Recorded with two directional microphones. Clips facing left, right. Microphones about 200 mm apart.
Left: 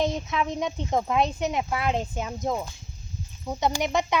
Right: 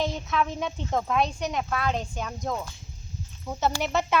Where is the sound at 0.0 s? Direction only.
20° left (ahead or behind).